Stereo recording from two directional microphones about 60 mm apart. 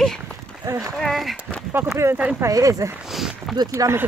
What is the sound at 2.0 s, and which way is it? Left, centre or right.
Speech, right.